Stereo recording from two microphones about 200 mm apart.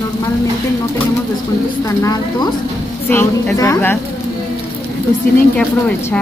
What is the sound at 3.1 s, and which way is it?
Speech, 10° left (ahead or behind).